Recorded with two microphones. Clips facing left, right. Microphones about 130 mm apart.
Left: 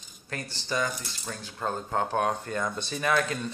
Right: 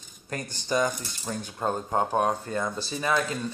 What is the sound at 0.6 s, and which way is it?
Speech, 20° right (ahead or behind).